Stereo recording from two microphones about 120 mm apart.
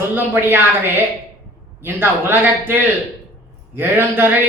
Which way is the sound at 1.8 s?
20° right (ahead or behind).